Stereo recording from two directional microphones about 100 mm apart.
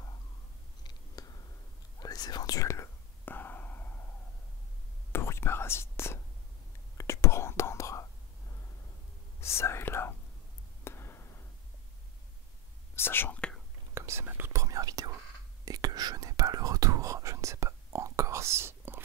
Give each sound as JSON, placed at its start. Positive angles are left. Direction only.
{"t": 1.2, "sound": "a sound", "side_deg": 40}
{"t": 2.0, "sound": "whispering", "side_deg": 40}
{"t": 5.1, "sound": "whispering", "side_deg": 25}
{"t": 9.4, "sound": "whispering", "side_deg": 25}
{"t": 10.8, "sound": "a sound", "side_deg": 25}
{"t": 12.9, "sound": "whispering", "side_deg": 20}
{"t": 13.9, "sound": "whispering", "side_deg": -25}